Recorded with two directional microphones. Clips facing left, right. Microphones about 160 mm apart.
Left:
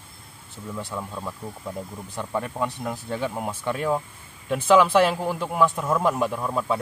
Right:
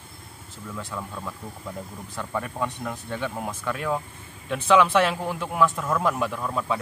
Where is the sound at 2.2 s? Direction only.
20° left (ahead or behind).